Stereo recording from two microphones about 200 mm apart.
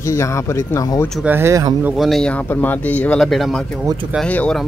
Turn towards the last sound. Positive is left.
turn(degrees=5)  # may be behind; listen again after turning